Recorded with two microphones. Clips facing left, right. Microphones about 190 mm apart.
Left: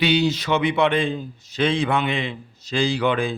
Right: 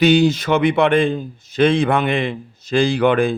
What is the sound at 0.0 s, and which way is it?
A man's voice, 45° right (ahead or behind).